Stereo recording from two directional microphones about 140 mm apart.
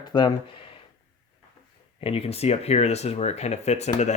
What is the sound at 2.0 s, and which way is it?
Speech, 45° left (ahead or behind).